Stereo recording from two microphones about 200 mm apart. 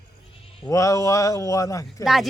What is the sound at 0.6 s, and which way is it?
Speech, 15° left (ahead or behind).